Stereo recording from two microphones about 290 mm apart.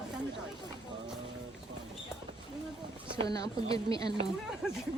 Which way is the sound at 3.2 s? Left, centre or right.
Centre.